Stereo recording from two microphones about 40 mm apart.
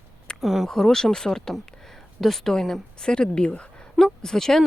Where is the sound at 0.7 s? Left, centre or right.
Centre; by 3.8 s left.